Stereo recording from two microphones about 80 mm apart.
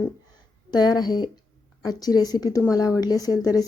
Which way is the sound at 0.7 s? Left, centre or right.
Left.